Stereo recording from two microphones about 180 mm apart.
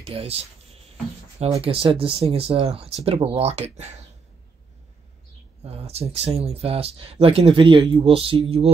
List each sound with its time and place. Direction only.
0.0 s speech: 35° right (ahead or behind)
5.6 s speech: 35° right (ahead or behind)